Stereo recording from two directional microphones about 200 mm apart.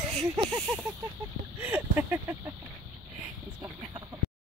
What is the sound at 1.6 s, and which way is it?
Speech, 10° right (ahead or behind).